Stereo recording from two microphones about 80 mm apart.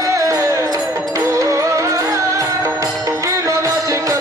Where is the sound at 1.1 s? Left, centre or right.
Right.